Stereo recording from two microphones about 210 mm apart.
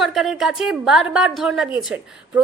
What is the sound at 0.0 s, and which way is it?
A woman's voice, centre (ahead or behind).